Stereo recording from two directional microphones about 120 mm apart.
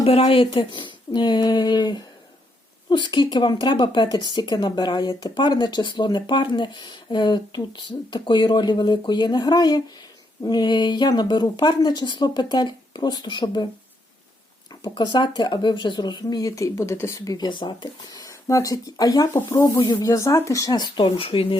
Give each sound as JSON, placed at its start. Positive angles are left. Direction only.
{"t": 0.0, "sound": "speech", "side_deg": 55}
{"t": 14.8, "sound": "speech", "side_deg": 40}